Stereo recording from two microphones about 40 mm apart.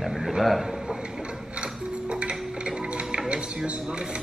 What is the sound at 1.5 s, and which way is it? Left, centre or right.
Music, right.